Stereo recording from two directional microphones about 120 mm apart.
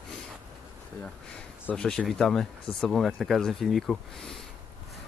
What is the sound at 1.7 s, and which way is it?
Speech, 10° left (ahead or behind).